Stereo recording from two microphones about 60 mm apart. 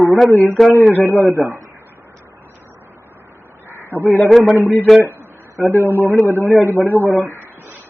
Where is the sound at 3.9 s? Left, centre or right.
Left.